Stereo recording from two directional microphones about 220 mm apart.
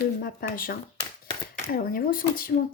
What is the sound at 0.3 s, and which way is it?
A woman's voice, 40° left (ahead or behind).